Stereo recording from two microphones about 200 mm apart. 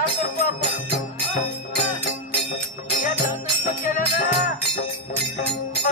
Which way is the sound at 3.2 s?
45° left (ahead or behind).